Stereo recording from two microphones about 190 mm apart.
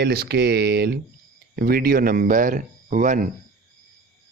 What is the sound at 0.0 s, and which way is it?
Speech, 55° right (ahead or behind).